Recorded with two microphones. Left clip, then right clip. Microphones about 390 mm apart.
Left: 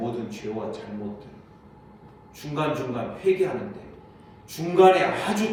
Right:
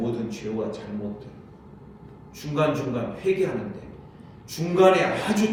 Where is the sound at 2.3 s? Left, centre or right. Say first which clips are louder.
Right 3 dB; centre.